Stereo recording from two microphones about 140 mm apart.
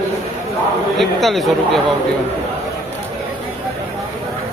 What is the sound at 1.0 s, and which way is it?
Speech, centre (ahead or behind).